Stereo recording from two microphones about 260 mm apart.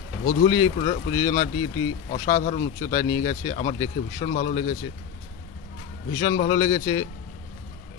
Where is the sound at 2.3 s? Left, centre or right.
Left.